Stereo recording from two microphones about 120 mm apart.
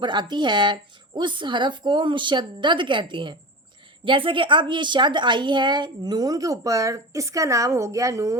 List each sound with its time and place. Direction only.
0.0 s a woman's voice: 40° right (ahead or behind)